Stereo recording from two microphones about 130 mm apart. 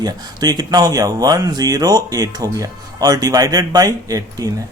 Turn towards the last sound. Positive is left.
turn(degrees=-25)  # may be behind; listen again after turning